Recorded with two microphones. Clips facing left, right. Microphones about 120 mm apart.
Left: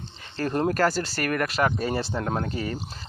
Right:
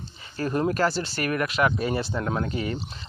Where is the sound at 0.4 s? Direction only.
45° left (ahead or behind).